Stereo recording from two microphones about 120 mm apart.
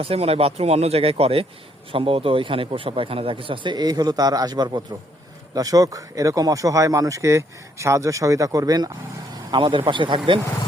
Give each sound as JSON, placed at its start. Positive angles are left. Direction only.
{"t": 0.0, "sound": "a man's voice", "side_deg": -55}